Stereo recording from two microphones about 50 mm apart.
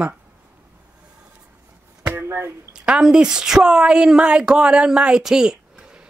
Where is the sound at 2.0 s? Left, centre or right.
Right.